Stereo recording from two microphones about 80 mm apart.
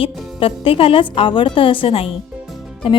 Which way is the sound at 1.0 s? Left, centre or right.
Left.